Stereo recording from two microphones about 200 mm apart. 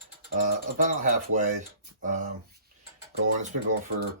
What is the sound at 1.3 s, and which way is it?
Speech, 40° right (ahead or behind).